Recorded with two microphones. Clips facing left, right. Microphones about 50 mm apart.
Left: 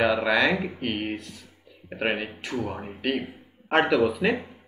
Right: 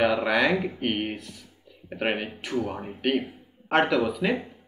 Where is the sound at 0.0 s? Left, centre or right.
Left.